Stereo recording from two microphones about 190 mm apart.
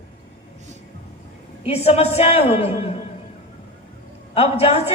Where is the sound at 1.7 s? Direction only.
30° left (ahead or behind).